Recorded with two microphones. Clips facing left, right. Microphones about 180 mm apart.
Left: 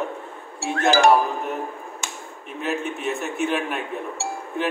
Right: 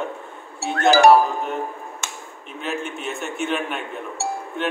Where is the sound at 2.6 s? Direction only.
Centre (ahead or behind).